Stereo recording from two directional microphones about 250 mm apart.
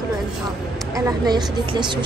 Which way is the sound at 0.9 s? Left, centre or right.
Centre.